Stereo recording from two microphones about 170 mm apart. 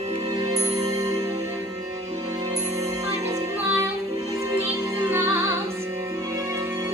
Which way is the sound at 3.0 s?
40° right (ahead or behind).